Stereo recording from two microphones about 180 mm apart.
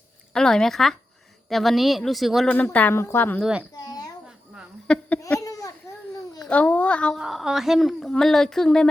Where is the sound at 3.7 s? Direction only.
20° left (ahead or behind).